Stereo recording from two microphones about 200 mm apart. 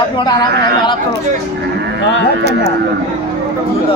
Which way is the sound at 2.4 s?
55° right (ahead or behind).